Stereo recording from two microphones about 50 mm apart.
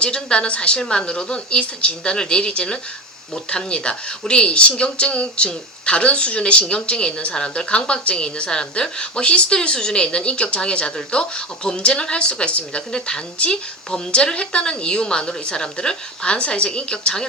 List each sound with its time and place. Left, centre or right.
0.0 s a woman's voice: centre